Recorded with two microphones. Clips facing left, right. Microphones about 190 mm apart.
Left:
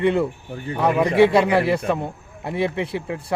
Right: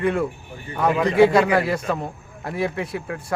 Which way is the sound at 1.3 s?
25° left (ahead or behind).